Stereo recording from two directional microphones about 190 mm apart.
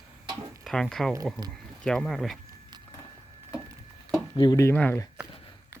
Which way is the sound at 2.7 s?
20° right (ahead or behind).